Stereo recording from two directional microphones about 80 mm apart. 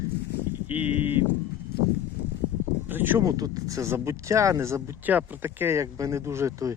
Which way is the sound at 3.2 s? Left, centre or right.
Right.